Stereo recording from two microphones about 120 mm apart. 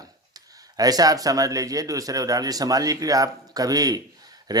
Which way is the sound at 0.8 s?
30° right (ahead or behind).